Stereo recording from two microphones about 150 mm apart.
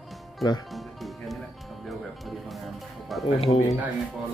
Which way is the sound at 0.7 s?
Centre (ahead or behind).